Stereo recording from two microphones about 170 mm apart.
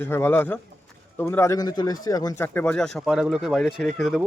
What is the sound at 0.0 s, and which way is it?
A man's voice, 10° left (ahead or behind).